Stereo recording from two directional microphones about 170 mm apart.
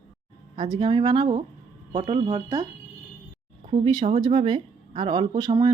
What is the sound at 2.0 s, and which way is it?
Speech, 40° right (ahead or behind).